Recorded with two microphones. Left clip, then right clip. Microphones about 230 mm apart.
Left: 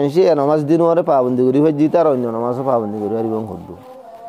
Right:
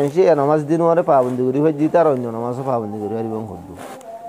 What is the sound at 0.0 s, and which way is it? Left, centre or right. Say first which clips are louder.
Speech: left 1 dB; left.